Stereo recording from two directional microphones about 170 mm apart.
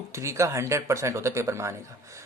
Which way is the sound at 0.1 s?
15° right (ahead or behind).